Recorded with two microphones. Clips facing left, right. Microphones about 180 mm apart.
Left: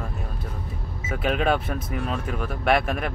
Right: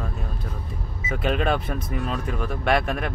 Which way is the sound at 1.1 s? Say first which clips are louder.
Even; 5° left (ahead or behind).